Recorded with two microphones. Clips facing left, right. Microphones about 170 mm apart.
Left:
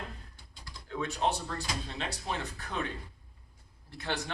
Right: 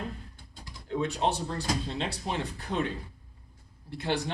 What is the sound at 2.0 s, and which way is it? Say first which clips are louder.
Speech: right 4 dB; 30° right (ahead or behind).